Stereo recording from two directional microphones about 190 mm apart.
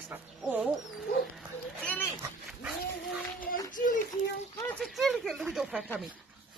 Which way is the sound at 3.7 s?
45° left (ahead or behind).